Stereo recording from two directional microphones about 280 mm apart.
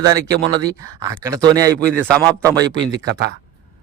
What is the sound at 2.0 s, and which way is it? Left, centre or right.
Speech, centre.